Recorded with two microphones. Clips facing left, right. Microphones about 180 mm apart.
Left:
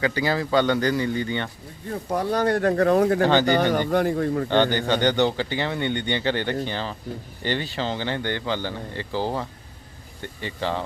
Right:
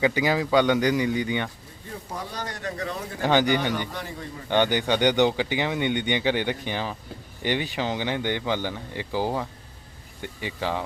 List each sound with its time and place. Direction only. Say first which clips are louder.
0.0 s speech: right 1 dB; 15° right (ahead or behind)
2.0 s speech: left 13 dB; 60° left (ahead or behind)
3.4 s speech: left 4 dB; 45° left (ahead or behind)
4.4 s speech: right 2 dB; 15° right (ahead or behind)